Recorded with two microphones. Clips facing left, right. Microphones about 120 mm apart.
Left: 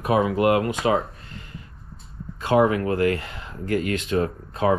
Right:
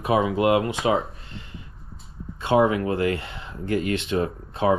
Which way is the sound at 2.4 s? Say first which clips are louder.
Left 1 dB; 20° right (ahead or behind).